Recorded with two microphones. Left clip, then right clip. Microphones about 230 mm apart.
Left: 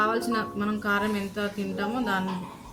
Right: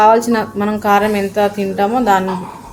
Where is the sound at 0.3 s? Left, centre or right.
Centre.